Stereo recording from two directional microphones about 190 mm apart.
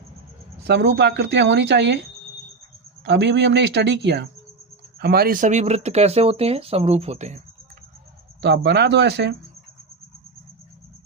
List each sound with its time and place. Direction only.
0.7 s speech: 65° right (ahead or behind)
3.0 s speech: 65° right (ahead or behind); by 7.4 s 35° right (ahead or behind)
8.4 s speech: 65° right (ahead or behind)